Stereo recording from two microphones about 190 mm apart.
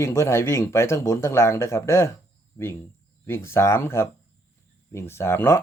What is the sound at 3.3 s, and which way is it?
Speech, 15° left (ahead or behind).